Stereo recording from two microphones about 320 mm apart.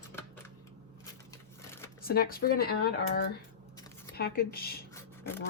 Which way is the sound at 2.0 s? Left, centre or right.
Left.